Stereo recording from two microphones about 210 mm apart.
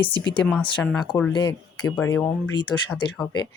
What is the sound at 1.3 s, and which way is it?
Speech, 20° left (ahead or behind).